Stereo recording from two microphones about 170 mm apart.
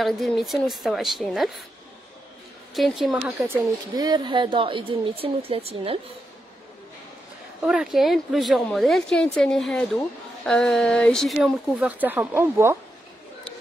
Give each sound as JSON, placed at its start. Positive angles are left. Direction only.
{"t": 0.0, "sound": "a woman's voice", "side_deg": 0}
{"t": 2.7, "sound": "a woman's voice", "side_deg": 0}
{"t": 3.9, "sound": "speech", "side_deg": -25}
{"t": 7.6, "sound": "a woman's voice", "side_deg": -5}